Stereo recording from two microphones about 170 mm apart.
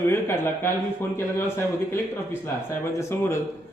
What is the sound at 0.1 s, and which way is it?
A man's voice, 15° left (ahead or behind).